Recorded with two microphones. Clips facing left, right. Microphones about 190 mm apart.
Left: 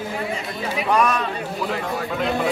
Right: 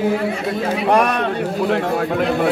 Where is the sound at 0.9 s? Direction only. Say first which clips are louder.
Right 3 dB; 65° right (ahead or behind).